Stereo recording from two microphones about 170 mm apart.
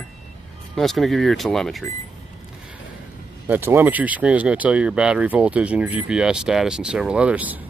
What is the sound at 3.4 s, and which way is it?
Speech, 10° right (ahead or behind).